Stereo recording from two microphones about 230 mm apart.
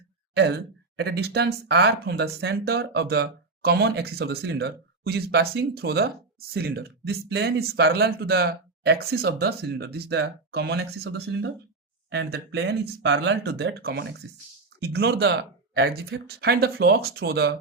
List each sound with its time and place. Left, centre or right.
0.3 s speech: right